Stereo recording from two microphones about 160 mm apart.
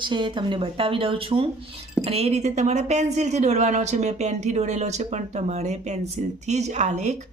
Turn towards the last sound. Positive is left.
turn(degrees=-45)  # may be behind; listen again after turning